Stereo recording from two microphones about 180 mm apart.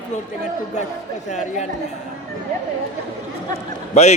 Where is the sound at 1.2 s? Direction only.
40° left (ahead or behind).